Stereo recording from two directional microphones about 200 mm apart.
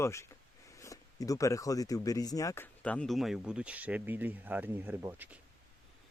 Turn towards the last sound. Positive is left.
turn(degrees=-10)  # may be behind; listen again after turning